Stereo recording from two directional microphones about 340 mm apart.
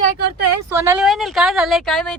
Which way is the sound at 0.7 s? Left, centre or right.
Centre.